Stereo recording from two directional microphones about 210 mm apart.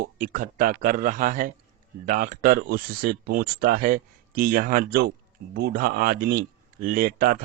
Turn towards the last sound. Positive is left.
turn(degrees=-40)  # may be behind; listen again after turning